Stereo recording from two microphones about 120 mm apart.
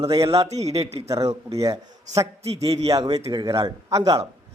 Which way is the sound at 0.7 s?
60° right (ahead or behind).